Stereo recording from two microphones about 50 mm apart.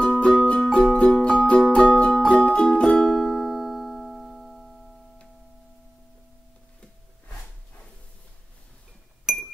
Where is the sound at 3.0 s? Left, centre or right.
Centre.